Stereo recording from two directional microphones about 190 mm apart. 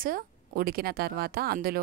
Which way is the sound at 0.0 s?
50° right (ahead or behind).